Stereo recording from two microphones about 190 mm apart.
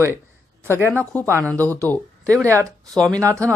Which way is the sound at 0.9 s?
10° left (ahead or behind).